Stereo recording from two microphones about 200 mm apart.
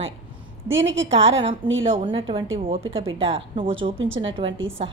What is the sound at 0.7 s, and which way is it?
Speech, 70° right (ahead or behind).